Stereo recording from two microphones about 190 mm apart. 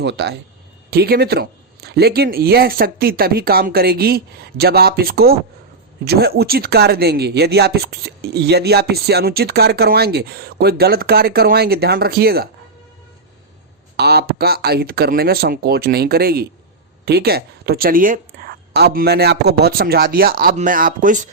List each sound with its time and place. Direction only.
0.0 s speech: 60° right (ahead or behind)
13.9 s speech: 55° right (ahead or behind)